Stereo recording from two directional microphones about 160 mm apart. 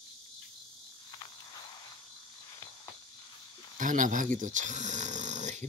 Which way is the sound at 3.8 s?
55° right (ahead or behind).